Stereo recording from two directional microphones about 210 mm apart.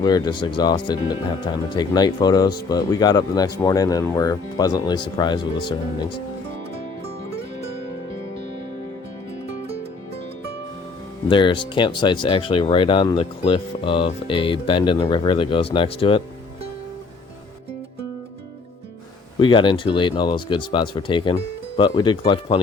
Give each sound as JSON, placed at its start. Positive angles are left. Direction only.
{"t": 0.0, "sound": "speech", "side_deg": 20}
{"t": 11.3, "sound": "speech", "side_deg": 25}
{"t": 19.4, "sound": "speech", "side_deg": 25}